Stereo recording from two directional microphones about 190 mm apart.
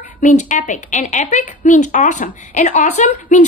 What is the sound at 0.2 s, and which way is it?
A woman's voice, 40° left (ahead or behind).